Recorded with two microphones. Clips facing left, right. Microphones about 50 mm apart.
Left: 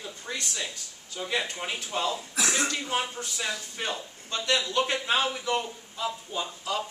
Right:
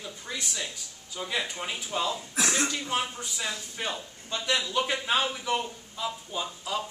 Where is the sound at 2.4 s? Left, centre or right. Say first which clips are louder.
Even; centre.